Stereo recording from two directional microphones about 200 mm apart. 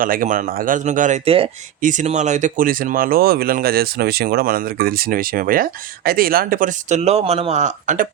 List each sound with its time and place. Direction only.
0.0 s speech: 45° right (ahead or behind)
1.8 s speech: 40° right (ahead or behind)